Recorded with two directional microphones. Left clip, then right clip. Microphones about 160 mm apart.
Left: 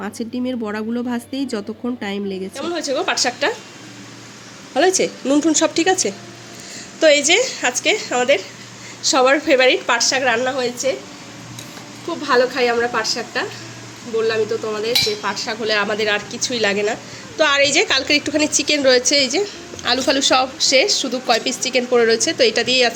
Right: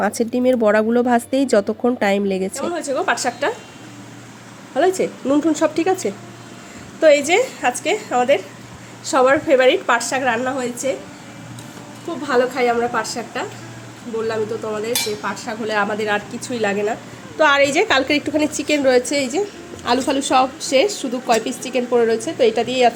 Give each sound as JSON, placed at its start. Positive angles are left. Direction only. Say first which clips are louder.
{"t": 0.0, "sound": "speech", "louder": "right 8 dB", "side_deg": -30}
{"t": 2.6, "sound": "dishes", "louder": "left 1 dB", "side_deg": 0}
{"t": 4.7, "sound": "dishes", "louder": "left 1 dB", "side_deg": 0}
{"t": 7.0, "sound": "dishes", "louder": "even", "side_deg": -5}
{"t": 12.2, "sound": "dishes", "louder": "left 1 dB", "side_deg": 0}